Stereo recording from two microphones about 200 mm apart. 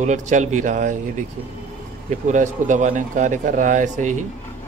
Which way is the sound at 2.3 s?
35° right (ahead or behind).